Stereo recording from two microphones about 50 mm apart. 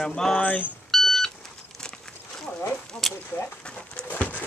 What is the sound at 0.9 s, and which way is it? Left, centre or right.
Vehicle, centre.